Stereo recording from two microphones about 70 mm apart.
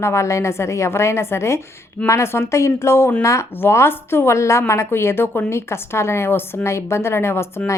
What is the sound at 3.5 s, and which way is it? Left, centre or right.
A woman's voice, left.